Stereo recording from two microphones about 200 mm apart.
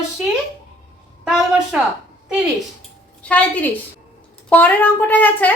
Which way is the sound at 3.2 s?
5° left (ahead or behind).